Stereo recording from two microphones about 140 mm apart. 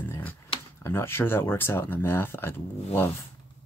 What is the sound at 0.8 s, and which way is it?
Speech, 15° left (ahead or behind).